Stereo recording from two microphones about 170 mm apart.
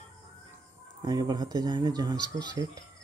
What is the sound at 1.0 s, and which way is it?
Speech, 20° right (ahead or behind).